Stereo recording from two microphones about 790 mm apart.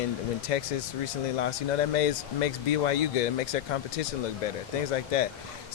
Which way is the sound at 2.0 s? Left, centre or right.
Left.